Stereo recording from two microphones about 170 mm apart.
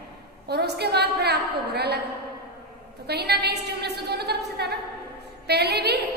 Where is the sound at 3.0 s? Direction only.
70° right (ahead or behind).